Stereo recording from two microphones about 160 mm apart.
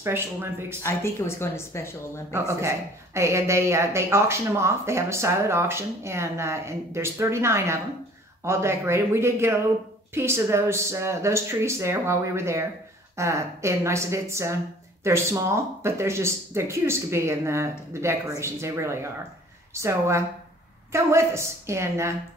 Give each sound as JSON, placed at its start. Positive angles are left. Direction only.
{"t": 0.0, "sound": "speech", "side_deg": -15}
{"t": 0.8, "sound": "a woman's voice", "side_deg": 15}
{"t": 2.3, "sound": "speech", "side_deg": -15}